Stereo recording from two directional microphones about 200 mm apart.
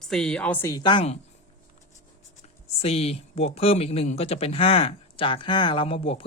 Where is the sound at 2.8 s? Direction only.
30° left (ahead or behind).